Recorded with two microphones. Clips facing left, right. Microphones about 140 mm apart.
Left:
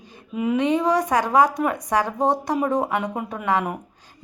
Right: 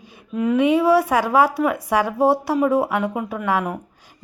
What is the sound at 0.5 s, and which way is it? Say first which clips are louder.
A woman's voice: right 5 dB; 10° right (ahead or behind).